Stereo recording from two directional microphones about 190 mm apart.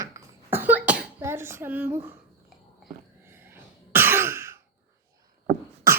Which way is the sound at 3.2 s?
10° right (ahead or behind).